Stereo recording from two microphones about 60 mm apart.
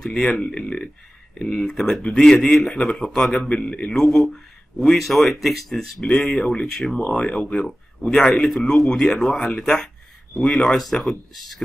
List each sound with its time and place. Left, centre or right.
0.0 s speech: centre
3.3 s speech: centre
3.9 s speech: centre